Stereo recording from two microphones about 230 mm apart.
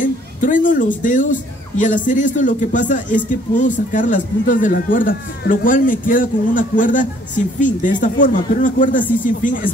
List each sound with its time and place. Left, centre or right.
0.0 s a man's voice: left